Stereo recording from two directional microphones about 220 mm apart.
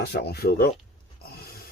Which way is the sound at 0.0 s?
50° left (ahead or behind).